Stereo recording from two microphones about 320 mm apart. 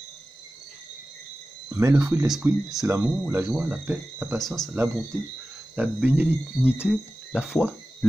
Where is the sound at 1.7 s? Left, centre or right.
Centre.